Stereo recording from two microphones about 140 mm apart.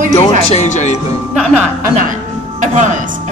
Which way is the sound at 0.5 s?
60° left (ahead or behind).